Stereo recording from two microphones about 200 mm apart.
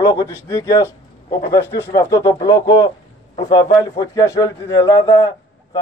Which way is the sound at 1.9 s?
20° left (ahead or behind).